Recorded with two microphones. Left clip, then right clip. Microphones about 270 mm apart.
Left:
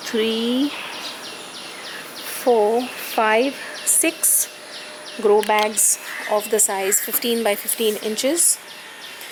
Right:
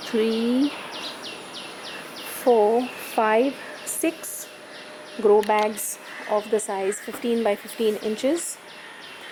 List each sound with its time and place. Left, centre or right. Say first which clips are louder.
0.0 s speech: left 2 dB; centre
0.3 s speech: left 2 dB; right
0.6 s bird: left 2 dB; centre
2.4 s speech: left 1 dB; right
3.2 s speech: left 2 dB; centre
5.2 s speech: left 1 dB; centre
5.5 s speech: left 4 dB; centre